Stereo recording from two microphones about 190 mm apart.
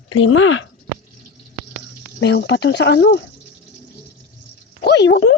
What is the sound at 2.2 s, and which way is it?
Speech, 70° left (ahead or behind).